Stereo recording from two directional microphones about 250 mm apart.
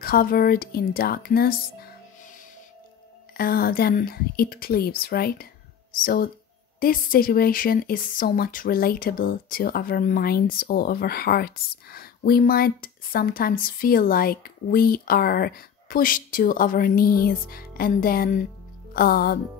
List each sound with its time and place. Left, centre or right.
0.0 s speech: left
3.3 s speech: left